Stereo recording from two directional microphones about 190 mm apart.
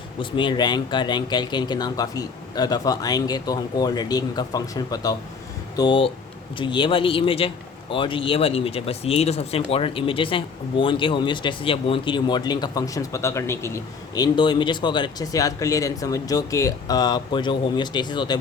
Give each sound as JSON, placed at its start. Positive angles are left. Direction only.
{"t": 0.2, "sound": "a man's voice", "side_deg": 25}